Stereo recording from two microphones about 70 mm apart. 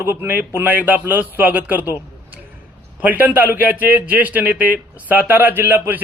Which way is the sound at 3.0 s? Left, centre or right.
Right.